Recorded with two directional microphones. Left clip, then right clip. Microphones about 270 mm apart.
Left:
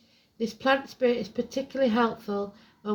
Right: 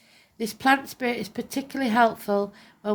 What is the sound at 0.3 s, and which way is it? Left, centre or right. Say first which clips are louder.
Speech: right 3 dB; right.